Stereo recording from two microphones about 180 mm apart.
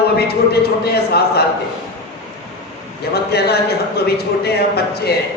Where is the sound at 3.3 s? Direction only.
60° left (ahead or behind).